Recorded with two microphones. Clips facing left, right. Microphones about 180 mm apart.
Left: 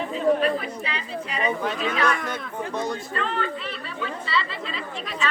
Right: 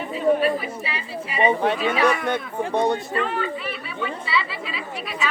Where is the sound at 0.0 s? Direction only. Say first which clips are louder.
Right 1 dB; 5° right (ahead or behind).